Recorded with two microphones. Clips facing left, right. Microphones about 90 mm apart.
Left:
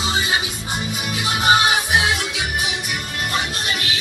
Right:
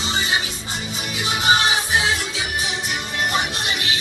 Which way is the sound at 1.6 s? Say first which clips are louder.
Left 2 dB; 15° left (ahead or behind).